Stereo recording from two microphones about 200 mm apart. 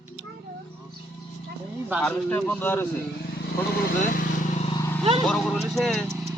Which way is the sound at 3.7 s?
45° left (ahead or behind).